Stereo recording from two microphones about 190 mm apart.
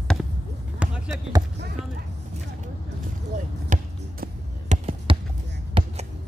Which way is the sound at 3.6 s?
40° right (ahead or behind).